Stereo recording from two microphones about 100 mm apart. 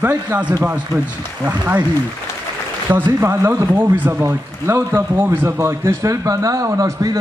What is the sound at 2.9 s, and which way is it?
A man's voice, 20° right (ahead or behind).